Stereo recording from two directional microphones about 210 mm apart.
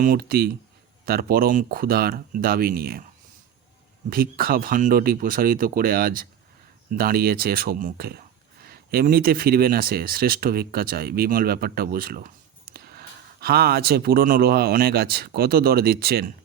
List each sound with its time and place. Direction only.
0.0 s speech: 45° right (ahead or behind)
4.1 s speech: 45° right (ahead or behind)